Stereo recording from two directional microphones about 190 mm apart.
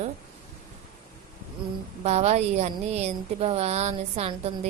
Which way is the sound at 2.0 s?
35° right (ahead or behind).